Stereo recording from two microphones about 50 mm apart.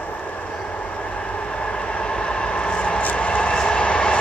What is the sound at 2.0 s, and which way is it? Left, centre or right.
Vehicle, centre.